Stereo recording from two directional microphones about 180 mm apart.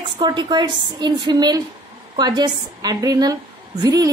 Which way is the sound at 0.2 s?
25° right (ahead or behind).